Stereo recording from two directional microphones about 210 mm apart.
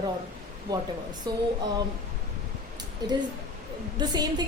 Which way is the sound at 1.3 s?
20° right (ahead or behind).